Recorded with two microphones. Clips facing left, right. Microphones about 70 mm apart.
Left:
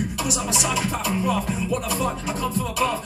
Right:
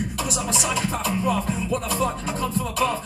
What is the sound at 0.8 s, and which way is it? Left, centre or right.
Music, right.